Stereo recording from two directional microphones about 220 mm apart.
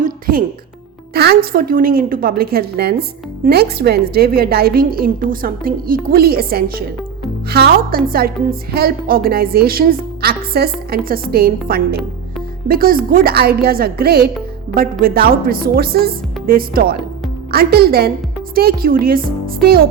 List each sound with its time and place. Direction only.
0.0 s music: 40° right (ahead or behind)
1.1 s a woman's voice: 45° right (ahead or behind)